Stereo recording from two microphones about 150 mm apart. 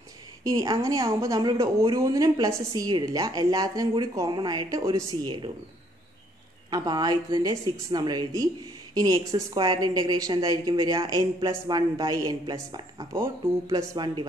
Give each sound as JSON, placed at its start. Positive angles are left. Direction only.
{"t": 0.4, "sound": "a woman's voice", "side_deg": -20}
{"t": 6.7, "sound": "a woman's voice", "side_deg": -25}